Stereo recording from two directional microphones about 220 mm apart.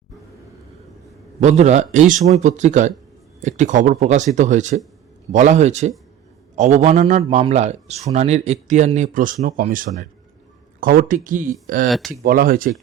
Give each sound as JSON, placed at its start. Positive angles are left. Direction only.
{"t": 1.4, "sound": "speech", "side_deg": -30}
{"t": 11.9, "sound": "speech", "side_deg": 0}
{"t": 12.2, "sound": "speech", "side_deg": -40}